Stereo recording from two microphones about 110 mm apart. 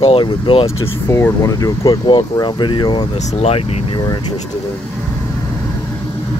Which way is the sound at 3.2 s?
85° left.